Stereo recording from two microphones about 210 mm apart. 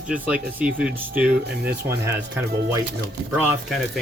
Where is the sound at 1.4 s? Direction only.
50° right (ahead or behind).